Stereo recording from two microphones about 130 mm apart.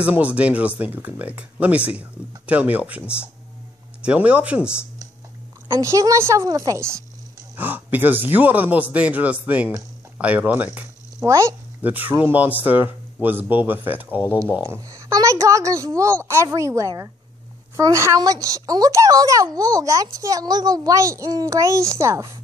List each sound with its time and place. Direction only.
0.0 s speech: 10° right (ahead or behind)
5.7 s a child's voice: 25° right (ahead or behind)
11.2 s speech: 20° right (ahead or behind)
14.7 s a child's voice: 25° right (ahead or behind)